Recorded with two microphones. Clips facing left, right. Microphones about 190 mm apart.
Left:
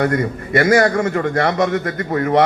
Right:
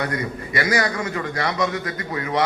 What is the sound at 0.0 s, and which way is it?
A man's voice, 50° left (ahead or behind).